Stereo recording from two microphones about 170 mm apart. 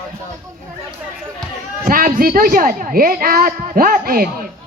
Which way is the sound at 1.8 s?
55° right (ahead or behind).